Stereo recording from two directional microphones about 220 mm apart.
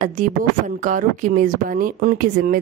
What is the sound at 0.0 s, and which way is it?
A woman's voice, 35° right (ahead or behind).